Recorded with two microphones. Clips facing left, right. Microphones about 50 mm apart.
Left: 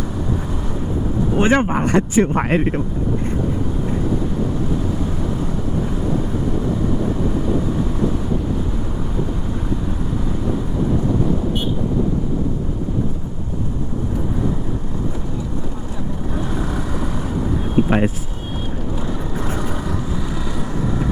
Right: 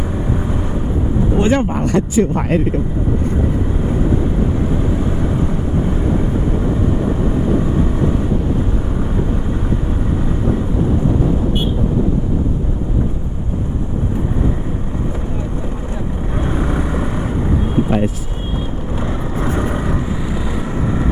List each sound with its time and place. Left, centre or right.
1.4 s speech: left
16.4 s vehicle: right
17.8 s a sound: left
19.4 s vehicle: right